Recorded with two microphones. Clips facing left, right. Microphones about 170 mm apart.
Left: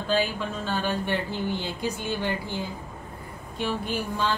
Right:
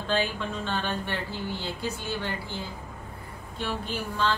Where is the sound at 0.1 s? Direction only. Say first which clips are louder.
Left 2 dB; 5° left (ahead or behind).